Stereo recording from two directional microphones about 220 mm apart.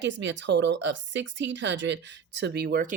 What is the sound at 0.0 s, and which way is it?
Speech, 55° right (ahead or behind).